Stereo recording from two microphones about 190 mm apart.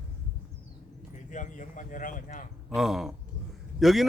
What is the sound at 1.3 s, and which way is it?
Speech, 40° left (ahead or behind).